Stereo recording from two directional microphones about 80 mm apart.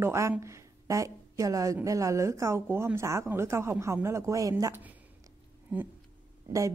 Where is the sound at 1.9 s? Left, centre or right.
Right.